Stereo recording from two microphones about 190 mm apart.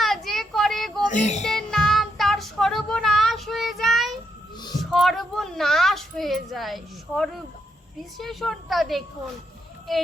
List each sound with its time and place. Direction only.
0.0 s child singing: centre (ahead or behind)
1.1 s child singing: 40° left (ahead or behind)
1.5 s child singing: centre (ahead or behind)
4.9 s a woman's voice: centre (ahead or behind)